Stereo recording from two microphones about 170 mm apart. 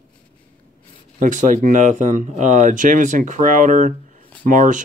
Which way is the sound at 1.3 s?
55° right (ahead or behind).